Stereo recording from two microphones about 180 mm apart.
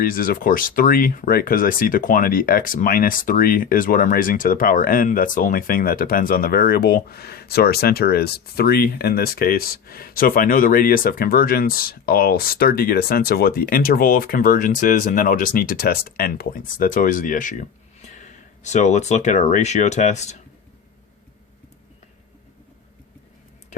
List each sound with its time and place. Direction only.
0.0 s speech: 50° left (ahead or behind)